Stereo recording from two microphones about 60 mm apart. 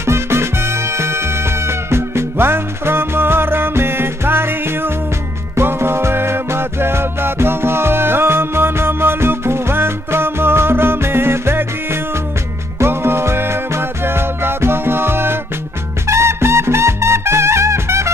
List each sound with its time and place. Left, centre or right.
0.0 s music: right